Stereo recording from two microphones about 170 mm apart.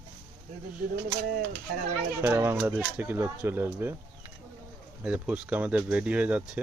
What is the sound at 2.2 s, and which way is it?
Speech, 15° right (ahead or behind).